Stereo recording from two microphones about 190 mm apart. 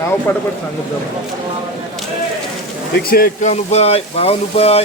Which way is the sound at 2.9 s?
50° left (ahead or behind).